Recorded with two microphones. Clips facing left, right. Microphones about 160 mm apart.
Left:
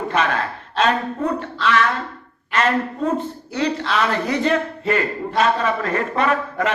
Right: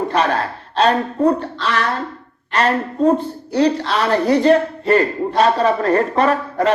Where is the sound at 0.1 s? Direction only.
35° right (ahead or behind).